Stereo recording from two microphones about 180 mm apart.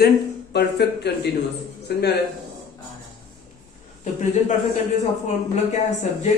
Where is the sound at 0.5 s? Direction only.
70° left (ahead or behind).